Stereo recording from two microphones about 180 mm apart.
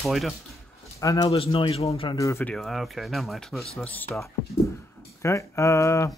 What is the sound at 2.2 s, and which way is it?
Speech, 15° left (ahead or behind).